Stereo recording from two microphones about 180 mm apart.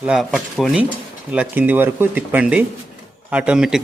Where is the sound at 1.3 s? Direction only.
10° right (ahead or behind).